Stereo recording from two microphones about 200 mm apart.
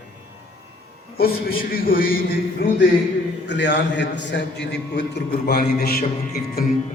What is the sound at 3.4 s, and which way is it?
A man's voice, 65° left (ahead or behind).